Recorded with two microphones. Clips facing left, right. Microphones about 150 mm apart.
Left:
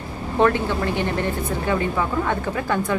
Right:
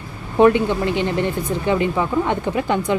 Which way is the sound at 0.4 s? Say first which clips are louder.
Right 5 dB; 15° right (ahead or behind).